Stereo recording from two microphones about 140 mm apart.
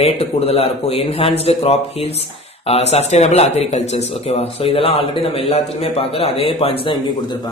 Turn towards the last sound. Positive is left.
turn(degrees=45)  # may be behind; listen again after turning